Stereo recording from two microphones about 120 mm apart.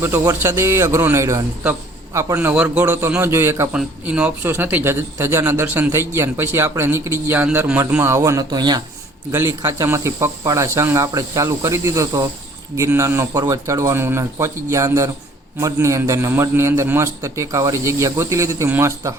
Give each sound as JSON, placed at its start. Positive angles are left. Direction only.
{"t": 0.0, "sound": "a man's voice", "side_deg": -20}
{"t": 9.3, "sound": "a man's voice", "side_deg": -20}